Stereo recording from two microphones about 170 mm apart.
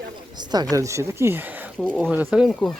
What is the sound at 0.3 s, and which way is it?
Speech, 25° right (ahead or behind).